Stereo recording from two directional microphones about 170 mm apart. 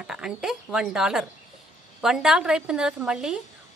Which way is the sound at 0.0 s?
5° right (ahead or behind).